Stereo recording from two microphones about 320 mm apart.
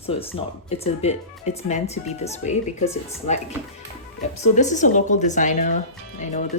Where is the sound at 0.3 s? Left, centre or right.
Centre.